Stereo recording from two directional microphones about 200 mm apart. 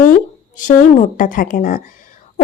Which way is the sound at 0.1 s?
40° left (ahead or behind).